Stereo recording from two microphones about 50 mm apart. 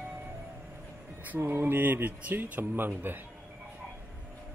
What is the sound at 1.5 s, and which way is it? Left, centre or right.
Speech, right.